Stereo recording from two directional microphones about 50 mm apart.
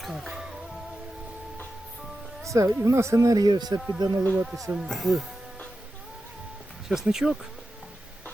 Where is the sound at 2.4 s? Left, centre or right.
Right.